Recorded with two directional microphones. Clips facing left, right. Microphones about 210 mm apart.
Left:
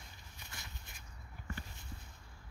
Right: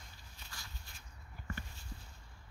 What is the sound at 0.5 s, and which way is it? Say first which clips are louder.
Walk: left 1 dB; 20° left (ahead or behind).